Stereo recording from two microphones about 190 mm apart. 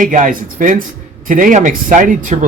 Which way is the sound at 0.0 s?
45° right (ahead or behind).